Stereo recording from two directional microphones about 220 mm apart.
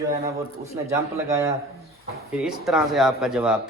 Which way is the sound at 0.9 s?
15° right (ahead or behind).